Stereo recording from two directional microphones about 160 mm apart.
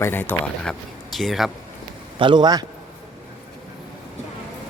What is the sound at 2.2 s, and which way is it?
Speech, 30° right (ahead or behind).